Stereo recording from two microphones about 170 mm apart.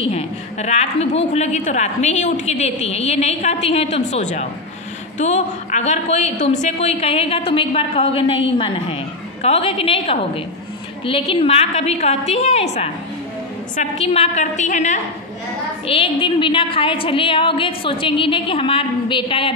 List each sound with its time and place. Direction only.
0.1 s a woman's voice: 40° left (ahead or behind)
15.9 s a woman's voice: 30° left (ahead or behind)